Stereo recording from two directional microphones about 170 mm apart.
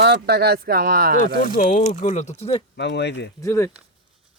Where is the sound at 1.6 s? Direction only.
50° left (ahead or behind).